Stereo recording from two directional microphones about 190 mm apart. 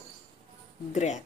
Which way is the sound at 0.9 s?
35° left (ahead or behind).